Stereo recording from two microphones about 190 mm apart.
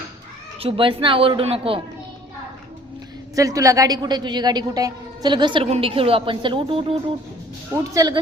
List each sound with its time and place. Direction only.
0.6 s a woman's voice: 30° right (ahead or behind)
3.3 s a woman's voice: 15° right (ahead or behind)
7.7 s a woman's voice: 20° right (ahead or behind)